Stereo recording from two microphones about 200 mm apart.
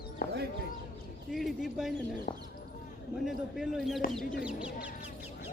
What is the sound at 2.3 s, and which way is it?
Speech, 40° left (ahead or behind).